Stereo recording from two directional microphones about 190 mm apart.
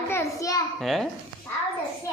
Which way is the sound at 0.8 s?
Centre (ahead or behind).